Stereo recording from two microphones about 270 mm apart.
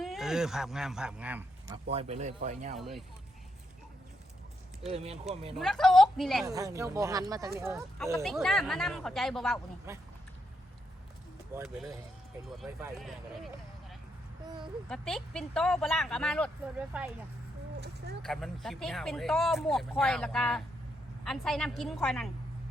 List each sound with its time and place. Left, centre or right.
0.0 s speech: centre; by 2.7 s right
2.7 s speech: centre
4.9 s speech: right
5.5 s speech: centre
6.4 s speech: centre
8.2 s speech: centre
9.9 s speech: centre
11.5 s speech: centre
14.8 s speech: centre
17.7 s a sound: right
18.2 s speech: centre